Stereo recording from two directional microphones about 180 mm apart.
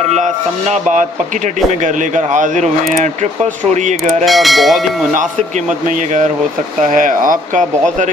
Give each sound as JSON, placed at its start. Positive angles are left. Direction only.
{"t": 0.1, "sound": "speech", "side_deg": -40}
{"t": 2.1, "sound": "speech", "side_deg": -45}
{"t": 4.2, "sound": "speech", "side_deg": 0}
{"t": 5.9, "sound": "speech", "side_deg": -45}